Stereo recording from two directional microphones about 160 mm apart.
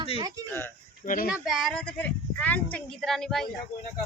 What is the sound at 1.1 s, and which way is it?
Speech, 60° left (ahead or behind).